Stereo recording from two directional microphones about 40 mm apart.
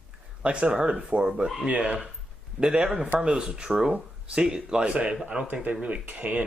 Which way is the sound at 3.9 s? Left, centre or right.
Right.